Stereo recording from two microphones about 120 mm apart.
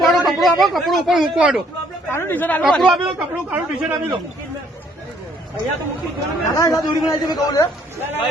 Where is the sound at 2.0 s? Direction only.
20° left (ahead or behind).